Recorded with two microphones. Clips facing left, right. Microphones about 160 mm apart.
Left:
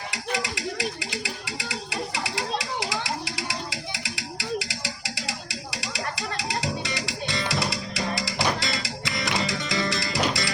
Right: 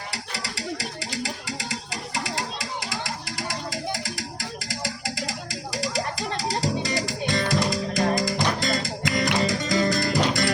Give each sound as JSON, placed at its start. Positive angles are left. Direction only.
{"t": 0.1, "sound": "music", "side_deg": -35}